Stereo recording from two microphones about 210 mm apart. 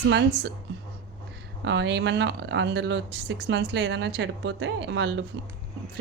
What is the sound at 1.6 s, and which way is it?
Speech, 55° right (ahead or behind).